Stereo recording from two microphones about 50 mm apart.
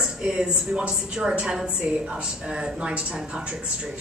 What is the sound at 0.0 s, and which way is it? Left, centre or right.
Speech, centre.